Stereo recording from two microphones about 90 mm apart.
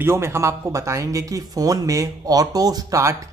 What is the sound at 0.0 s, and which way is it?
Speech, 30° right (ahead or behind).